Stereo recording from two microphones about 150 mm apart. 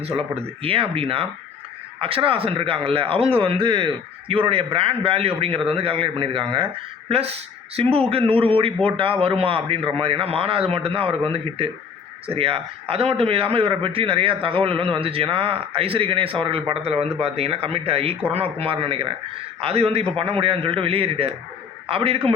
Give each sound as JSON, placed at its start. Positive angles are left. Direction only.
{"t": 0.2, "sound": "a man's voice", "side_deg": -40}